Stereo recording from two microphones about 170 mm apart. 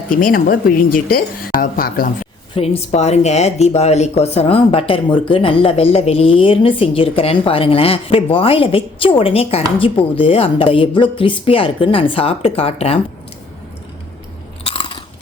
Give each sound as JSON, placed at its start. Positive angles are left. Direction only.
{"t": 0.2, "sound": "speech", "side_deg": 55}
{"t": 2.6, "sound": "speech", "side_deg": 40}
{"t": 14.6, "sound": "chewing", "side_deg": 30}